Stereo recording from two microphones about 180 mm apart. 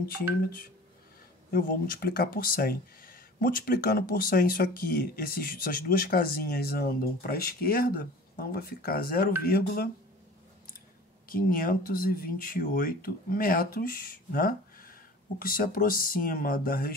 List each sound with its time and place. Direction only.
0.1 s speech: 55° left (ahead or behind)
11.2 s speech: 55° left (ahead or behind)